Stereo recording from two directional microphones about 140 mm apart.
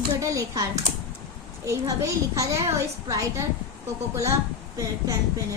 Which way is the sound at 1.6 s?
20° right (ahead or behind).